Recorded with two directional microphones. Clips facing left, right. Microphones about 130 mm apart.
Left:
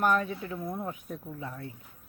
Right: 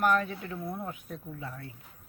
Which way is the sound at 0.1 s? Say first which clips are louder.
Even; 10° left (ahead or behind).